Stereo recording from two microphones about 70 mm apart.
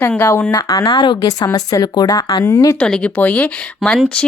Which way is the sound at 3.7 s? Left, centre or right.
Centre.